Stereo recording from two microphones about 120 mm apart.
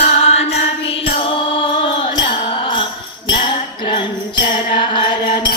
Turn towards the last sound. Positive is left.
turn(degrees=40)  # may be behind; listen again after turning